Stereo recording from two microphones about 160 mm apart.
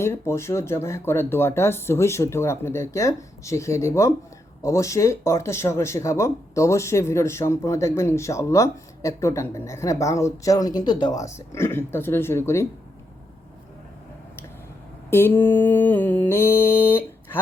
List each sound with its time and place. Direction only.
0.0 s speech: 15° left (ahead or behind)
15.1 s speech: 15° left (ahead or behind)